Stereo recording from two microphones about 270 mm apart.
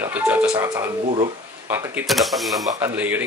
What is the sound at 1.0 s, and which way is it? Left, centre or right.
Speech, right.